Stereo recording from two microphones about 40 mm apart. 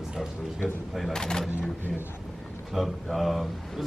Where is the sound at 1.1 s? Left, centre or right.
Centre.